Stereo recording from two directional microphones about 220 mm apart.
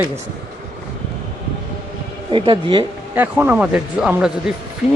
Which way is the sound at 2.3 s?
20° right (ahead or behind).